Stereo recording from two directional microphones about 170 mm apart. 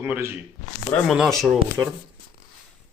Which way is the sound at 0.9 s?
Centre (ahead or behind).